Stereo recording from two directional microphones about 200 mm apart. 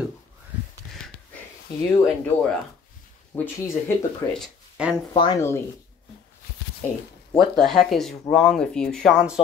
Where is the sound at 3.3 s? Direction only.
5° left (ahead or behind).